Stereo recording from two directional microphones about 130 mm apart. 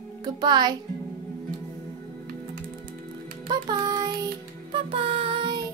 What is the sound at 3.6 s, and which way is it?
Music, 30° right (ahead or behind).